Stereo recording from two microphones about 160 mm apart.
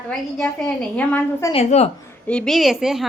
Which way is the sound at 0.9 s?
10° left (ahead or behind).